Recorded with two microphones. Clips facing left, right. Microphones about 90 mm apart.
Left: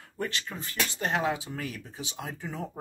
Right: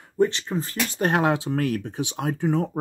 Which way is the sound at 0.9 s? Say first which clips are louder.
Right 8 dB; 55° right (ahead or behind).